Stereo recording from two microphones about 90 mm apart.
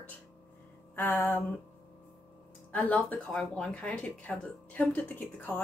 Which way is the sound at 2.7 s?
15° left (ahead or behind).